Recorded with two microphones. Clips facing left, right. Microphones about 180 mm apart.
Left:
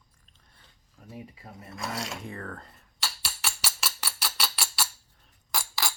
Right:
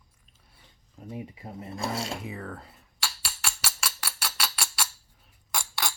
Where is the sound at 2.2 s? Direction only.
5° right (ahead or behind).